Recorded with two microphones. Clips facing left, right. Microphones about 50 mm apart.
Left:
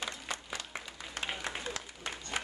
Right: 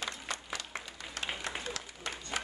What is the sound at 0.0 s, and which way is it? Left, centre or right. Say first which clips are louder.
Applause: even; centre.